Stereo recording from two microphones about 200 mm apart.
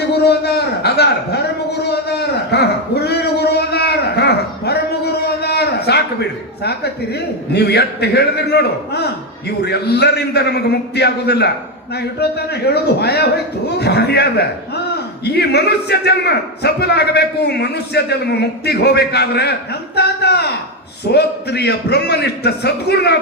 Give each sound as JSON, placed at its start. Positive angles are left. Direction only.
{"t": 0.1, "sound": "a man's voice", "side_deg": 55}
{"t": 2.5, "sound": "a sound", "side_deg": 55}
{"t": 9.6, "sound": "a man's voice", "side_deg": 55}